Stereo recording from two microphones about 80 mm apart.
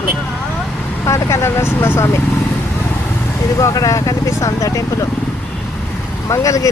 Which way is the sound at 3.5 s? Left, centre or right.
Left.